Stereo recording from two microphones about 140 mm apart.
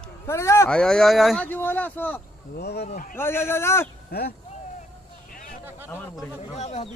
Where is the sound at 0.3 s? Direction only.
20° left (ahead or behind).